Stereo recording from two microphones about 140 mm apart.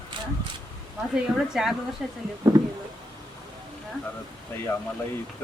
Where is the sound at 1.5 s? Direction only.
Centre (ahead or behind).